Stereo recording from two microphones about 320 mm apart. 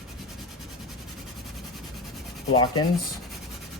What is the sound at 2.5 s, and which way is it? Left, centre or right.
Speech, centre.